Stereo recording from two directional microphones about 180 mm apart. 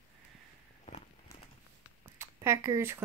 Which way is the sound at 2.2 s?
15° right (ahead or behind).